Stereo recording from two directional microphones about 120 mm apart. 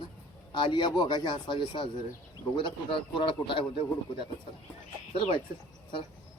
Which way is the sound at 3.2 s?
45° left (ahead or behind).